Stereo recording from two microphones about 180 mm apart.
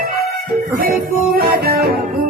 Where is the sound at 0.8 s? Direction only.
55° right (ahead or behind).